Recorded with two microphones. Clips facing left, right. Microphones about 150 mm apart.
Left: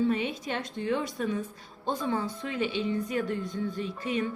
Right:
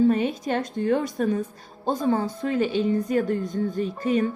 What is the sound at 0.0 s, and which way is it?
A woman's voice, 45° right (ahead or behind).